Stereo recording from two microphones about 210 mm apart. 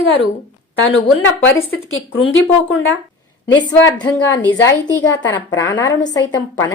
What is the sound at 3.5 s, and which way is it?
A woman's voice, 20° left (ahead or behind).